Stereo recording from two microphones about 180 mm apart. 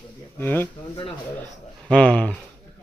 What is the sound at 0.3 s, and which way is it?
Speech, 10° left (ahead or behind).